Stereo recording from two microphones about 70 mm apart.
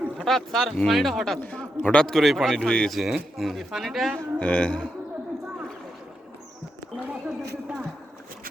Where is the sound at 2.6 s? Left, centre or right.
Centre.